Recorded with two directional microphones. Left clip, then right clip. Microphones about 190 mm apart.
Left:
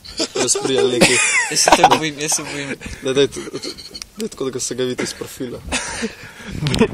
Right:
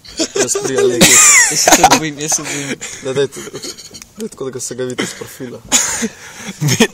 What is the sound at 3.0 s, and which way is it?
Speech, 30° left (ahead or behind).